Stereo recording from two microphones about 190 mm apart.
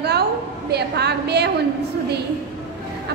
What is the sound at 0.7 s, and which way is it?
Speech, 60° right (ahead or behind).